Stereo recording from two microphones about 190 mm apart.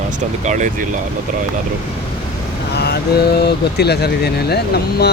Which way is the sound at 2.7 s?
60° left (ahead or behind).